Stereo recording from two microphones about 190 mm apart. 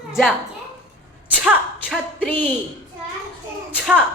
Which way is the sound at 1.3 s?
5° right (ahead or behind).